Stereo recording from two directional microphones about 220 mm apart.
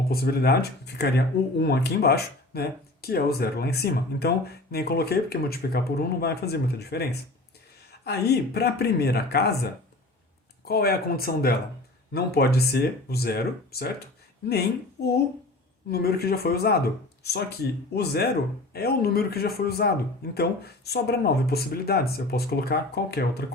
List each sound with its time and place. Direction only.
0.1 s speech: 45° left (ahead or behind)
10.7 s speech: 45° left (ahead or behind)
15.9 s speech: 45° left (ahead or behind)